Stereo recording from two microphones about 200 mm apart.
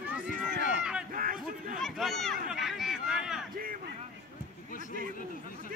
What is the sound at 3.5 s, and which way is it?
Speech, 45° right (ahead or behind).